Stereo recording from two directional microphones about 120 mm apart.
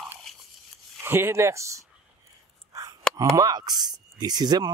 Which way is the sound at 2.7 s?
30° right (ahead or behind).